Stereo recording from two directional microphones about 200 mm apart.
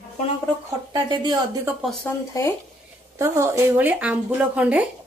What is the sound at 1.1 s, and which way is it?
Speech, 20° right (ahead or behind).